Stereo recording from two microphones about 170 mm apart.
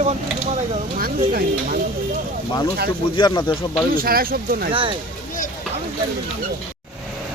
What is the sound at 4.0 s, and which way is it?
Speech, 60° right (ahead or behind).